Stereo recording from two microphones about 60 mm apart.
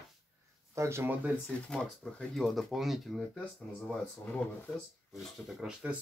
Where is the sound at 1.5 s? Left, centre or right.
Centre.